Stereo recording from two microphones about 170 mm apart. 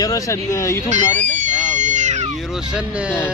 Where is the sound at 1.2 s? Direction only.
45° right (ahead or behind).